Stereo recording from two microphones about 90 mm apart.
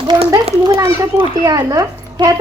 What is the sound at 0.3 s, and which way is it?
A child's voice, 35° right (ahead or behind).